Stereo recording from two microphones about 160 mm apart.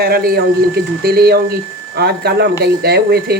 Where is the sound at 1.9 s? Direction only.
90° right.